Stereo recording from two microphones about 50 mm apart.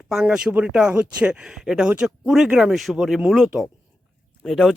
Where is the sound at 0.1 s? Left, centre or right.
Centre.